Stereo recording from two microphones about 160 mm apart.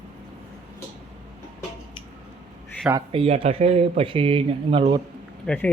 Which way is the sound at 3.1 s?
35° right (ahead or behind).